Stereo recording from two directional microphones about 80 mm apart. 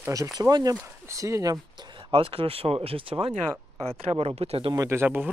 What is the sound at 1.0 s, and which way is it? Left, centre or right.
Speech, right.